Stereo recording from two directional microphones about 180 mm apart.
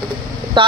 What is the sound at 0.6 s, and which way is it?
Speech, 25° right (ahead or behind).